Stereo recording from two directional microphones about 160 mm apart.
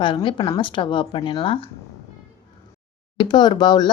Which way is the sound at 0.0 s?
30° left (ahead or behind).